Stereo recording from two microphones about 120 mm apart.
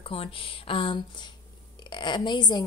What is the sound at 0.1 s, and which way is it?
A woman's voice, 50° left (ahead or behind).